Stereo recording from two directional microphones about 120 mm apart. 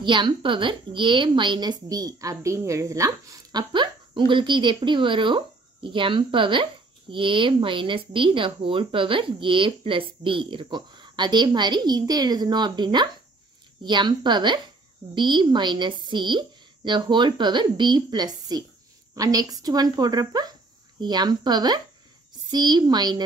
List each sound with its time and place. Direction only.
0.0 s a woman's voice: 40° right (ahead or behind)